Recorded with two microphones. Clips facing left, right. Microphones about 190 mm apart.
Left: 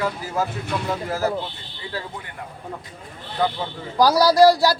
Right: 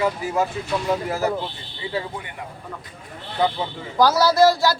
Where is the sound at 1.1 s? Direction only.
10° right (ahead or behind).